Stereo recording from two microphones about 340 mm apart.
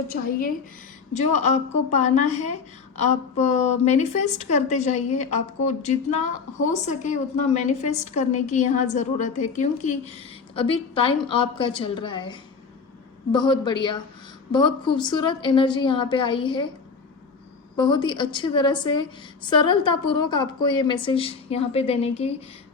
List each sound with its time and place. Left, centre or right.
0.1 s a woman's voice: left
17.7 s a woman's voice: centre